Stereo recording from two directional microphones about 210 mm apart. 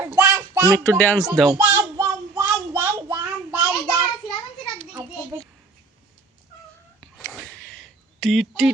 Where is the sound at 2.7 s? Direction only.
10° right (ahead or behind).